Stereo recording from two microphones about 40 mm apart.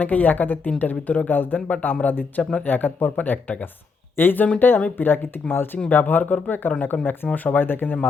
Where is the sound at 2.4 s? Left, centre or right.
Left.